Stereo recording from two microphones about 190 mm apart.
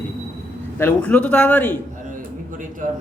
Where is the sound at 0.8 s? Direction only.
5° left (ahead or behind).